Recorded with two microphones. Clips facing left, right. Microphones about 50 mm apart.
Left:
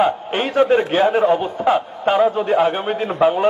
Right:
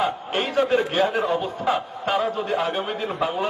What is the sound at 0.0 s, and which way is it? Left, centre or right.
A man's voice, left.